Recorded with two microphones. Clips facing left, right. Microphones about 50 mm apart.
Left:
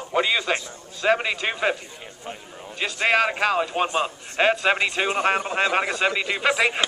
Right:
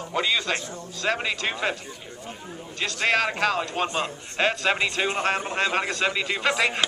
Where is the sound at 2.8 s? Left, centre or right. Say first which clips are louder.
Left 3 dB; centre.